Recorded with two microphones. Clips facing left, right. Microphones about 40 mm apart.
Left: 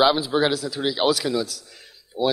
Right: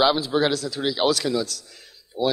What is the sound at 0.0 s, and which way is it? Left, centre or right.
Speech, centre.